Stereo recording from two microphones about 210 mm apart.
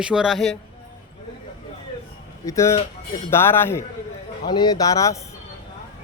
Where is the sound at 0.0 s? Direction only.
5° right (ahead or behind).